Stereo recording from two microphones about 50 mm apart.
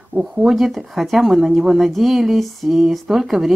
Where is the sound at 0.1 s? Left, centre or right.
Centre.